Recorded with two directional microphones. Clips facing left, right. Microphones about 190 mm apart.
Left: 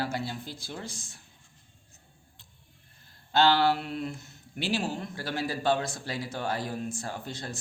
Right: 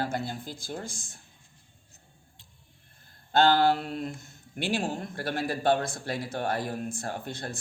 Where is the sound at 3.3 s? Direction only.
45° right (ahead or behind).